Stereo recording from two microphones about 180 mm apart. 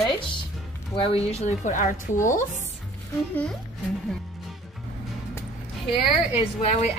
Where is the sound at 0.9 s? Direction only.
30° left (ahead or behind).